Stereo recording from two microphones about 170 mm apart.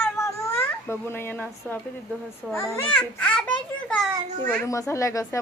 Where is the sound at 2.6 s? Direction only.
10° left (ahead or behind).